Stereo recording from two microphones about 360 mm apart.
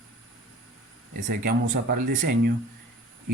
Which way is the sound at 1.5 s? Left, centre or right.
Right.